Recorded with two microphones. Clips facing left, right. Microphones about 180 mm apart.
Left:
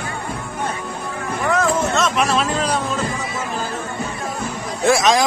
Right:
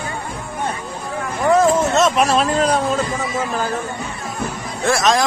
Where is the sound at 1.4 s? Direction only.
35° right (ahead or behind).